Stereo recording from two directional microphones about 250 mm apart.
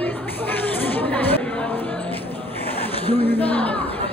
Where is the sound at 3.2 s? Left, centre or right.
Centre.